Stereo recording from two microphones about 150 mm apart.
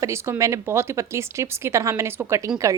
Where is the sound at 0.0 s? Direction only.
20° right (ahead or behind).